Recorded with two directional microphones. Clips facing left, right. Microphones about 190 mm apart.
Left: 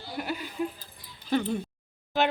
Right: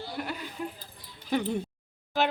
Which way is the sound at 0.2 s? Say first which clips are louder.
Left 5 dB; 10° left (ahead or behind).